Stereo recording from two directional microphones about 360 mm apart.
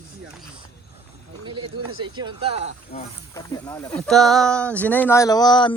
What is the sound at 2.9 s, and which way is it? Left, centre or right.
Speech, centre.